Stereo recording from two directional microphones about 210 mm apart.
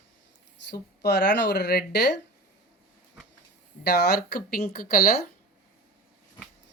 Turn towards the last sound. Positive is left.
turn(degrees=45)  # may be behind; listen again after turning